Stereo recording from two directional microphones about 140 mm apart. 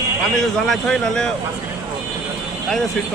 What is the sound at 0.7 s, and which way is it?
Speech, 5° left (ahead or behind).